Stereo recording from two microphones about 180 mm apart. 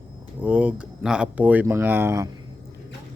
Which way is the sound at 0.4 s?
10° right (ahead or behind).